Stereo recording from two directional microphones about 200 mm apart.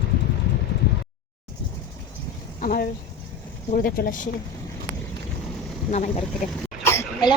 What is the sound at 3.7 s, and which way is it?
Speech, 45° left (ahead or behind).